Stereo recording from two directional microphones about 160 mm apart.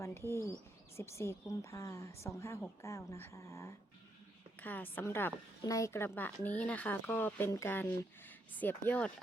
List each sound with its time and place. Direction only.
0.3 s a woman's voice: 20° left (ahead or behind)